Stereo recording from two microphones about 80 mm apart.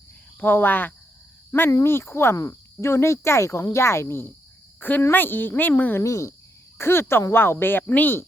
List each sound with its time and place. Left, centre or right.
0.3 s speech: left
6.0 s speech: left
6.7 s speech: left